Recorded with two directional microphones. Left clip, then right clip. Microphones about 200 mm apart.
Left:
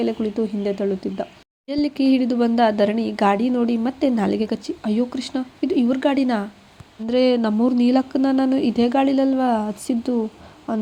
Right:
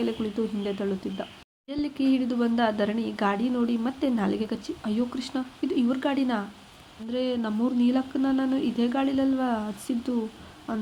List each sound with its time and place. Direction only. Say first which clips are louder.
0.0 s speech: left 6 dB; 20° left (ahead or behind)
7.1 s speech: left 11 dB; 40° left (ahead or behind)